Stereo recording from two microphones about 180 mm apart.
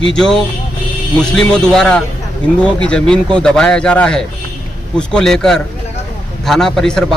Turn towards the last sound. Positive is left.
turn(degrees=5)  # may be behind; listen again after turning